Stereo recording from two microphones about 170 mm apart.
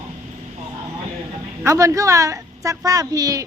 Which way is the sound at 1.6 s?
20° right (ahead or behind).